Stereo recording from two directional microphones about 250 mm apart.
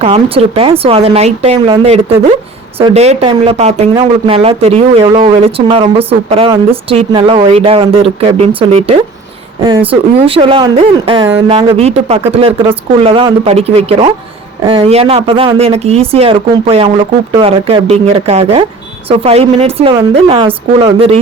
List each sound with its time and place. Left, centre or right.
0.0 s speech: right